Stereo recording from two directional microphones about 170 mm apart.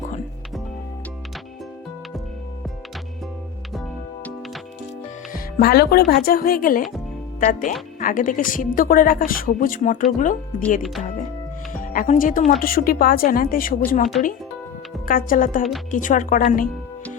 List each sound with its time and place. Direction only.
3.7 s music: centre (ahead or behind)
5.3 s a woman's voice: 60° left (ahead or behind)
11.7 s a woman's voice: 50° left (ahead or behind)